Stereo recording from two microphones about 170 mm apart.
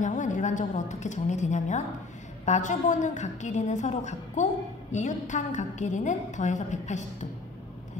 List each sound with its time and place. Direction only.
0.0 s a woman's voice: 45° left (ahead or behind)